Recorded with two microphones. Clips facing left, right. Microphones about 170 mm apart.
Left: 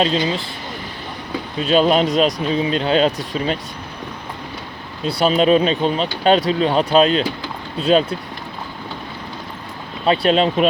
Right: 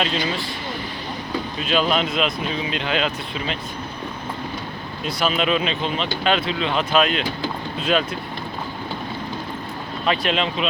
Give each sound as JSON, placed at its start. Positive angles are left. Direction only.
{"t": 0.0, "sound": "speech", "side_deg": 30}
{"t": 1.5, "sound": "speech", "side_deg": 35}
{"t": 5.0, "sound": "speech", "side_deg": 35}
{"t": 10.1, "sound": "speech", "side_deg": 40}